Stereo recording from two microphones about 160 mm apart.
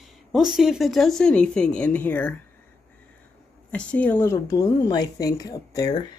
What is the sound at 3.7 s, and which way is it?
Speech, 10° left (ahead or behind).